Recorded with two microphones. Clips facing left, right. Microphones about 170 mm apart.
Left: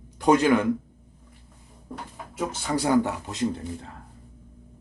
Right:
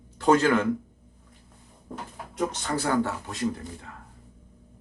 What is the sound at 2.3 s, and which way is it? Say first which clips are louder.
Speech: left 1 dB; 5° left (ahead or behind).